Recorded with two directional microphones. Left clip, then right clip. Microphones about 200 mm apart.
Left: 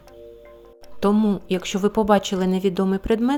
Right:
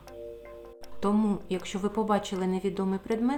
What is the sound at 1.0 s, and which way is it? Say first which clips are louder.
Speech: left 8 dB; 25° left (ahead or behind).